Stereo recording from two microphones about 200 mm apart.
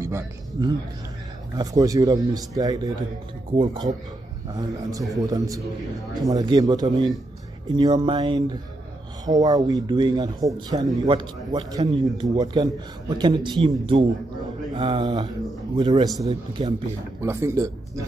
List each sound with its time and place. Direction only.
0.0 s a man's voice: 15° right (ahead or behind)
16.3 s speech: 30° right (ahead or behind)
17.2 s a man's voice: 15° right (ahead or behind)